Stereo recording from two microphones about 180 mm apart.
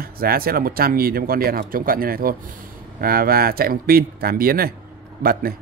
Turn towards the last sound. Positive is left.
turn(degrees=-55)  # may be behind; listen again after turning